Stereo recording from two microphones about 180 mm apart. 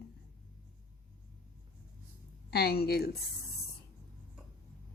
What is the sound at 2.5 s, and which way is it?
Speech, 60° left (ahead or behind).